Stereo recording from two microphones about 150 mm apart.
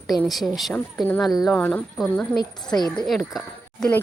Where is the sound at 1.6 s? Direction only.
10° left (ahead or behind).